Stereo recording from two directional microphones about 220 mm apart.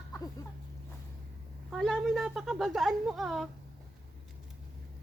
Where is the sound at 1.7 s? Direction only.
Centre (ahead or behind).